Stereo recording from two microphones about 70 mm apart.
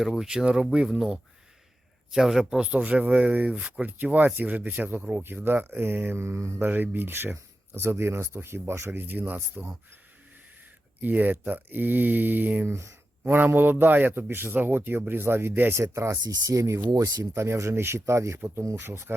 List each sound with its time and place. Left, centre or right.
0.0 s a man's voice: centre; by 6.7 s right
6.7 s a man's voice: right
11.0 s a man's voice: right
16.5 s speech: right
17.3 s a man's voice: right